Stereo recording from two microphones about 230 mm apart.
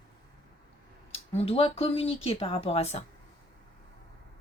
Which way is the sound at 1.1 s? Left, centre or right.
Left.